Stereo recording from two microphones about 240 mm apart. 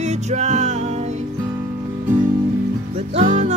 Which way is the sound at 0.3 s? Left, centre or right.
Right.